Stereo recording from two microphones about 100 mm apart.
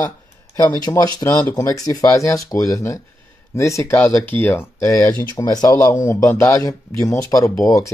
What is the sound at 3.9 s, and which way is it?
Speech, 15° left (ahead or behind).